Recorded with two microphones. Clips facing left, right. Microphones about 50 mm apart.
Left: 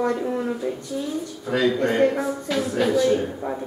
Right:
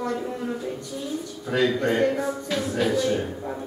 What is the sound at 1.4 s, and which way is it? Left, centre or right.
Speech, centre.